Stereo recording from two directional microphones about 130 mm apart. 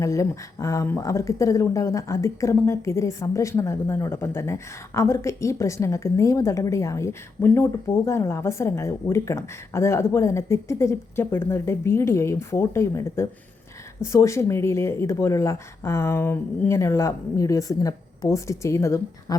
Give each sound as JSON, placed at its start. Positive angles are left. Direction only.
{"t": 0.0, "sound": "speech", "side_deg": 25}